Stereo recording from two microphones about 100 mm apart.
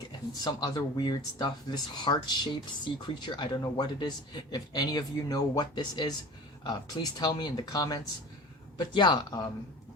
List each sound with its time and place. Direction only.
0.4 s speech: 45° left (ahead or behind)